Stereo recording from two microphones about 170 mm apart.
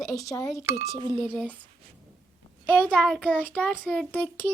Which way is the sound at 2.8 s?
10° left (ahead or behind).